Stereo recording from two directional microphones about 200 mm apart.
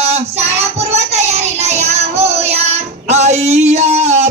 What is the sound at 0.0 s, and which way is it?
Child singing, 30° right (ahead or behind).